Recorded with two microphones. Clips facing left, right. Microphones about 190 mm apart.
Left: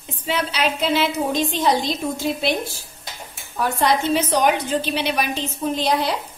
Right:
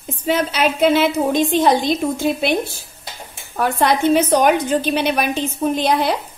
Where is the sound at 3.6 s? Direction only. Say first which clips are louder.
Right 3 dB; 55° right (ahead or behind).